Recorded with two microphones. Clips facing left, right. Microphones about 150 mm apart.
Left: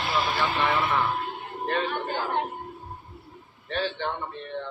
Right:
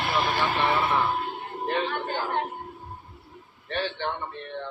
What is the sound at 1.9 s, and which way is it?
Speech, 5° left (ahead or behind).